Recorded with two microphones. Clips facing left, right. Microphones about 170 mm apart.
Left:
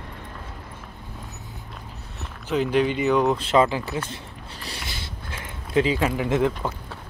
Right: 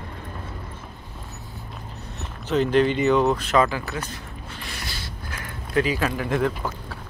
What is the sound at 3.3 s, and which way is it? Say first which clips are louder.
Speech: left 1 dB; 25° left (ahead or behind).